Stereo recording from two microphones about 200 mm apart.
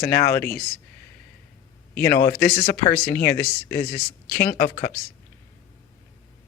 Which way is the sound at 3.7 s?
50° left (ahead or behind).